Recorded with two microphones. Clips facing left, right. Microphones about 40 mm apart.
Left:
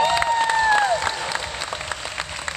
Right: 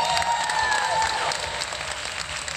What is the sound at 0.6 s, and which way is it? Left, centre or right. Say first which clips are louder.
Applause: left 7 dB; left.